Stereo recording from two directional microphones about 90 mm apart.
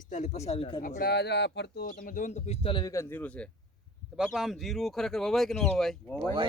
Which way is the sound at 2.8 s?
35° left (ahead or behind).